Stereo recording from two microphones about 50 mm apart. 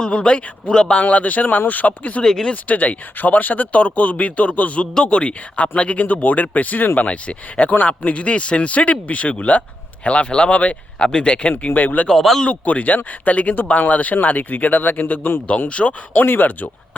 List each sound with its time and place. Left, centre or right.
0.0 s speech: left
2.2 s speech: centre
2.6 s speech: left
7.1 s speech: left
11.6 s speech: left
12.0 s a man's voice: centre
12.4 s speech: left
15.7 s speech: left
16.1 s speech: left